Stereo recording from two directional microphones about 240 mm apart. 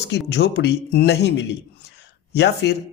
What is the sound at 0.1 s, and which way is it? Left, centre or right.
A man's voice, left.